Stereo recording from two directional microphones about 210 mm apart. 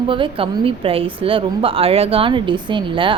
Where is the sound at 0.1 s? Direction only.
25° right (ahead or behind).